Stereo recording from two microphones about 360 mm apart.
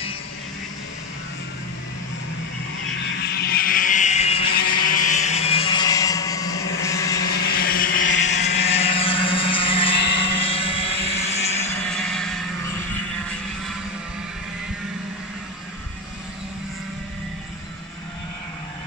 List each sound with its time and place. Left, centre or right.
3.3 s vehicle: left; by 7.2 s centre
7.3 s vehicle: left
11.9 s vehicle: centre